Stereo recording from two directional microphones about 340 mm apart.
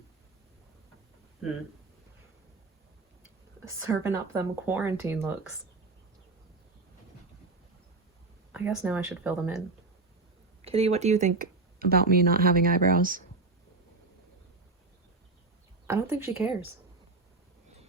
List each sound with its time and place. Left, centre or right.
3.8 s speech: centre
8.5 s speech: centre
10.6 s speech: centre
15.9 s speech: centre